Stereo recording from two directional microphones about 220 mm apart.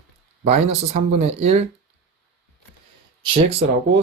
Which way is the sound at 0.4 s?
30° right (ahead or behind).